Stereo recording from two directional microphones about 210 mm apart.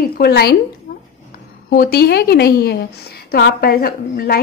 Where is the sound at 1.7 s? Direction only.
45° left (ahead or behind).